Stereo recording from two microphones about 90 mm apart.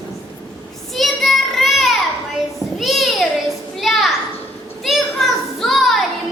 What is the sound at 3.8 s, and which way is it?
Children playing, centre (ahead or behind).